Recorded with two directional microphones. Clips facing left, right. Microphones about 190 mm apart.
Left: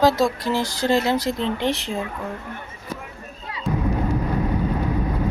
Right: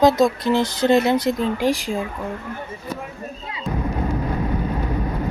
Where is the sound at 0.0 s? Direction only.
20° right (ahead or behind).